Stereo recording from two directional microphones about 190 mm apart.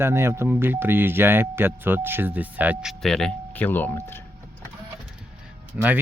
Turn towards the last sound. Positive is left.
turn(degrees=-10)  # may be behind; listen again after turning